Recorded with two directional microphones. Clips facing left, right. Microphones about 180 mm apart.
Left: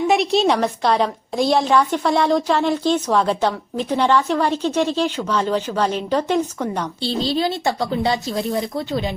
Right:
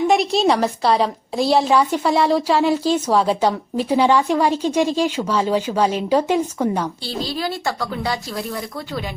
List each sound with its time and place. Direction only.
0.1 s a woman's voice: centre (ahead or behind)
7.0 s a woman's voice: 25° left (ahead or behind)